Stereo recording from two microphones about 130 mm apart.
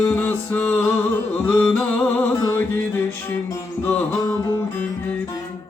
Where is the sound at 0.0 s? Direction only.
15° left (ahead or behind).